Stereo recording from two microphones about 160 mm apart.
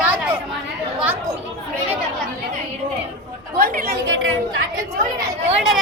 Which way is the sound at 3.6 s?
65° right (ahead or behind).